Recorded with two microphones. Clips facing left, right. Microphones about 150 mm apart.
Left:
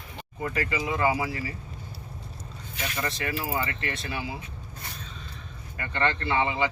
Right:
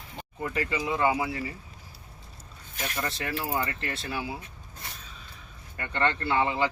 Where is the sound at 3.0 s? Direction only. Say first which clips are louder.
Left 1 dB; centre (ahead or behind).